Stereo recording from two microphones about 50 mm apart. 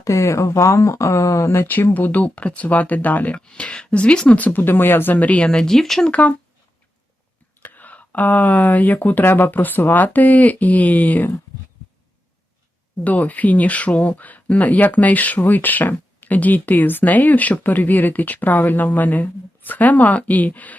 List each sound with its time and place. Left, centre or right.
0.0 s speech: left
1.6 s speech: left
3.4 s speech: left
4.4 s speech: left
4.6 s speech: left
5.1 s speech: left
5.5 s speech: centre
6.1 s speech: left
7.6 s speech: left
9.2 s speech: left
13.1 s speech: left